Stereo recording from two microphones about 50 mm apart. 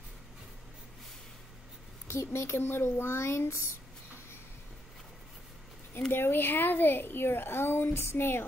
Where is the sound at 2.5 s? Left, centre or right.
Left.